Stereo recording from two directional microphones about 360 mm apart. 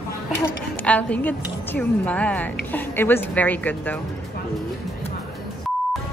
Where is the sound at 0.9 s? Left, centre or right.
Centre.